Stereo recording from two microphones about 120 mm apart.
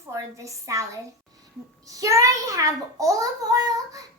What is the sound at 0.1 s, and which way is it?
A child's voice, 25° right (ahead or behind).